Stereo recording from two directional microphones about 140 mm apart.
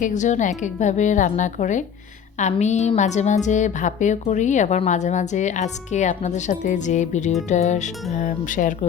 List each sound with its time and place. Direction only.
0.0 s a woman's voice: 60° left (ahead or behind)